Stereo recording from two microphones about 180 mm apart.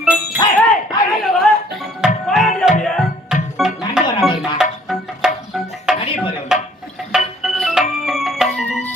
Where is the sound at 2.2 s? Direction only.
Centre (ahead or behind).